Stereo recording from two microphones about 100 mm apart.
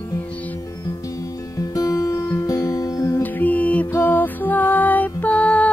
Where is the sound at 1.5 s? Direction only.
35° left (ahead or behind).